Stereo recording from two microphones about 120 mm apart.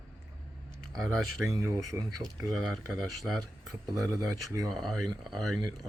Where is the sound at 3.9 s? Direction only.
25° right (ahead or behind).